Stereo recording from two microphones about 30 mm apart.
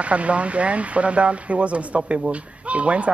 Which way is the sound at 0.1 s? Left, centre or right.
Right.